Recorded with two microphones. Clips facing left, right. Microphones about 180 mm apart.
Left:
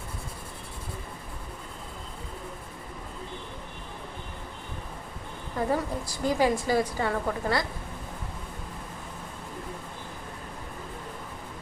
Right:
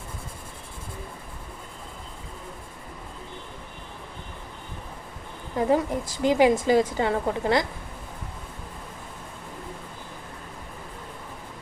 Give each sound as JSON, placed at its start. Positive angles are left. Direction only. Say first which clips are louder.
{"t": 5.5, "sound": "a woman's voice", "louder": "right 5 dB", "side_deg": -20}